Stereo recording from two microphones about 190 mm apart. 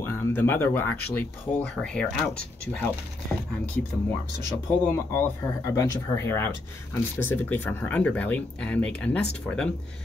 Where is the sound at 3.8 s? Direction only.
5° left (ahead or behind).